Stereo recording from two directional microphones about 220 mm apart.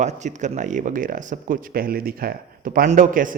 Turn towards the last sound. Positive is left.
turn(degrees=-35)  # may be behind; listen again after turning